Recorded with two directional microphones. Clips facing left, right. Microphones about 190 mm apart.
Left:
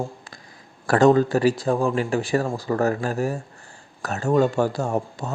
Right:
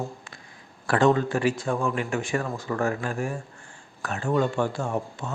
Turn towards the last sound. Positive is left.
turn(degrees=40)  # may be behind; listen again after turning